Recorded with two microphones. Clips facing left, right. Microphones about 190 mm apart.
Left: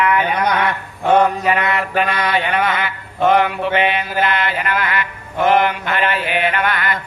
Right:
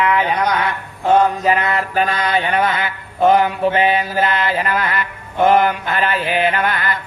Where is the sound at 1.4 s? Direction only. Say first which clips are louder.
Right 1 dB; 35° right (ahead or behind).